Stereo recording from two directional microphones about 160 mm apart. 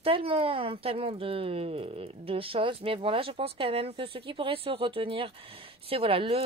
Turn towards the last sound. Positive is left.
turn(degrees=-35)  # may be behind; listen again after turning